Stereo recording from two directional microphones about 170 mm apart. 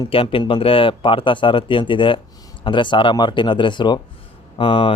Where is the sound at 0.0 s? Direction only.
30° left (ahead or behind).